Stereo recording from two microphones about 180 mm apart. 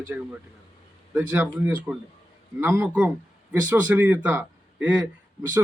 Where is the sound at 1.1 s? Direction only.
15° right (ahead or behind).